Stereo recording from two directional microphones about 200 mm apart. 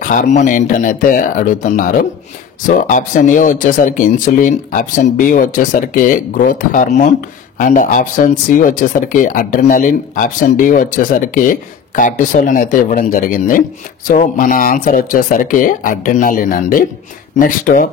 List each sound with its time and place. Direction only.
0.0 s speech: 40° left (ahead or behind)